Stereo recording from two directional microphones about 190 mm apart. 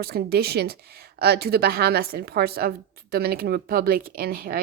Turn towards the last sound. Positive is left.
turn(degrees=-50)  # may be behind; listen again after turning